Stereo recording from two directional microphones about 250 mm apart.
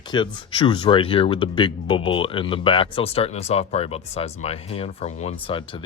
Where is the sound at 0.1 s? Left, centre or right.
Centre.